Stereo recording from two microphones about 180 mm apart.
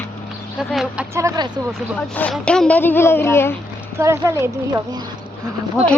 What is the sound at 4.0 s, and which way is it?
Speech, 15° right (ahead or behind).